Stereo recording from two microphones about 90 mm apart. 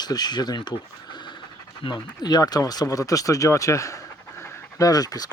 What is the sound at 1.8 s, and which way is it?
Speech, 50° left (ahead or behind).